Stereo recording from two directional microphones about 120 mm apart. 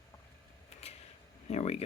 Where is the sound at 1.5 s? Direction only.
60° left (ahead or behind).